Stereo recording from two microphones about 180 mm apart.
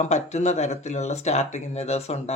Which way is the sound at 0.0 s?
40° left (ahead or behind).